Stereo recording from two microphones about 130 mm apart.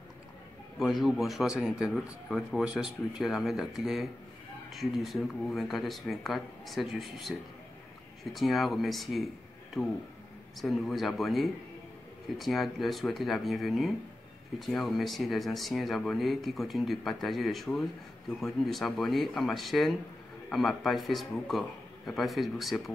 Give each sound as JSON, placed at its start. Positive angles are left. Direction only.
{"t": 0.7, "sound": "a man's voice", "side_deg": 0}